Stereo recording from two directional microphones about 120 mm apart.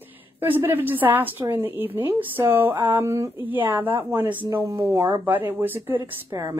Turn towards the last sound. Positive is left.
turn(degrees=-20)  # may be behind; listen again after turning